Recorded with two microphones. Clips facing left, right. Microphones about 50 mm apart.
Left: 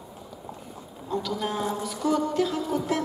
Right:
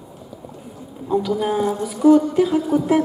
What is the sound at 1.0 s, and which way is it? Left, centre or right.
Speech, centre.